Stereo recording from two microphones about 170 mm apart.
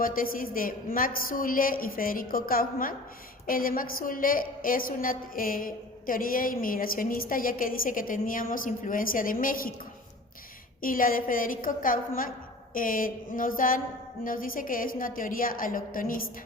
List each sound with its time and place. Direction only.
0.0 s a woman's voice: 55° left (ahead or behind)
10.8 s a woman's voice: 55° left (ahead or behind)
12.7 s a sound: 55° left (ahead or behind)
14.3 s a woman's voice: 55° left (ahead or behind)